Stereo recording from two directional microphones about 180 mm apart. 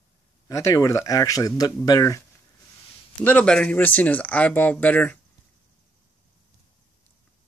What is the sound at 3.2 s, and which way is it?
Speech, 5° left (ahead or behind).